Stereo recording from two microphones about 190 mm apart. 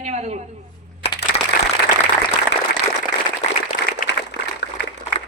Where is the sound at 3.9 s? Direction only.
60° left (ahead or behind).